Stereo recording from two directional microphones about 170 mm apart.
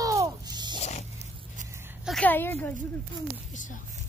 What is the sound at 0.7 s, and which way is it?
Zipper, 40° left (ahead or behind).